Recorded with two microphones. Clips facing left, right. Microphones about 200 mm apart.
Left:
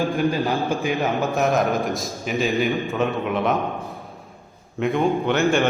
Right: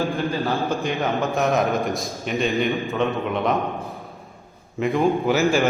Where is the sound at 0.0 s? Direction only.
15° left (ahead or behind).